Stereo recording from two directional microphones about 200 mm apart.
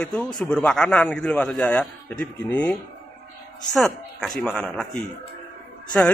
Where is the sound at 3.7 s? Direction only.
Centre (ahead or behind).